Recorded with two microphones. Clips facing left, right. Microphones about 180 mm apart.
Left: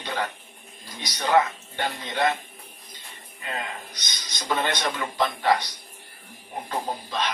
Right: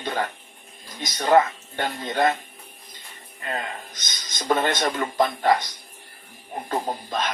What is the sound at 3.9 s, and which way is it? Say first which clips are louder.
Speech: right 2 dB; 45° right (ahead or behind).